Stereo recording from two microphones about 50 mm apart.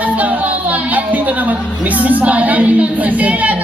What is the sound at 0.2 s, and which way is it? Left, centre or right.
Music, right.